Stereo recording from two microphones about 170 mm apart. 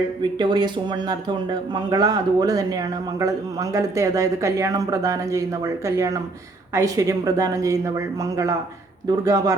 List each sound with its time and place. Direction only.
0.2 s speech: 25° right (ahead or behind)